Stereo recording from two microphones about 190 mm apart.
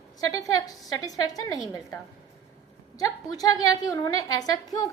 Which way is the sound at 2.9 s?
20° left (ahead or behind).